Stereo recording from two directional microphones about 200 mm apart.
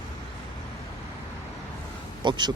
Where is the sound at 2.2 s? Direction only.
20° right (ahead or behind).